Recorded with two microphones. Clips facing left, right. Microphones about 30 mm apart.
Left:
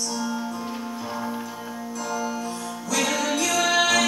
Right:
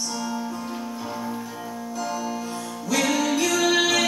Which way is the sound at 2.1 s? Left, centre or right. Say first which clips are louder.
Left 3 dB; centre.